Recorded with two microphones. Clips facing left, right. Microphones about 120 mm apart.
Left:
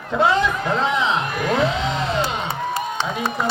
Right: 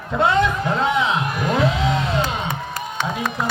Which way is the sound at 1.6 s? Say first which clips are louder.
Right 1 dB; 5° right (ahead or behind).